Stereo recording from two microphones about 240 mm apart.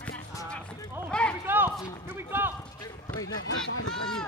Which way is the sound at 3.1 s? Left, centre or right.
Left.